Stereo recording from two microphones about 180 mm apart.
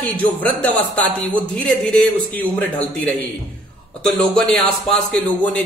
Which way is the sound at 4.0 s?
5° left (ahead or behind).